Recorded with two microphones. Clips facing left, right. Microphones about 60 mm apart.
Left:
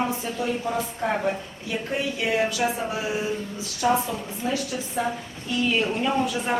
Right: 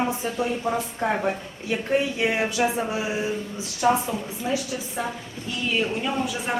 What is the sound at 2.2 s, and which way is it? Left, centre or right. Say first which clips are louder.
A woman's voice: right 1 dB; right.